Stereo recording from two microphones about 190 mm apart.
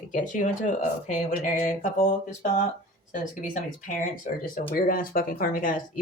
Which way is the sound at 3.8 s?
45° left (ahead or behind).